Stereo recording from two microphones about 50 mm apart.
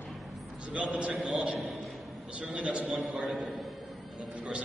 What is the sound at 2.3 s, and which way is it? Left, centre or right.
Speech, right.